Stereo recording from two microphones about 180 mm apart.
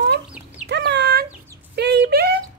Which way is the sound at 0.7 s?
70° right (ahead or behind).